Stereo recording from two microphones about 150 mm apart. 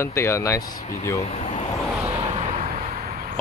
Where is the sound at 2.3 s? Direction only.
45° right (ahead or behind).